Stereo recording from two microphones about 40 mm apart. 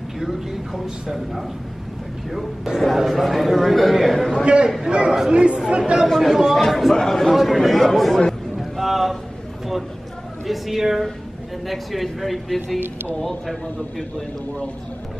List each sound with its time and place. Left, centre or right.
0.2 s speech: centre
2.3 s speech: centre
2.8 s a man's voice: centre
4.8 s speech: right
6.2 s a man's voice: centre
8.5 s a sound: centre
10.4 s a man's voice: centre